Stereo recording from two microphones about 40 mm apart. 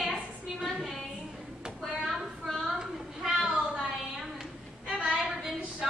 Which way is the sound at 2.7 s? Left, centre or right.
Centre.